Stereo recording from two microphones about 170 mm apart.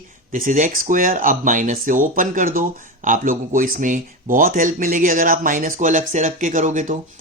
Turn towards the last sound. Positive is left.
turn(degrees=-45)  # may be behind; listen again after turning